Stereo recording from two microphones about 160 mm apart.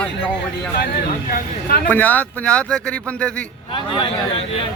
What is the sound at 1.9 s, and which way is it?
Speech, 10° left (ahead or behind).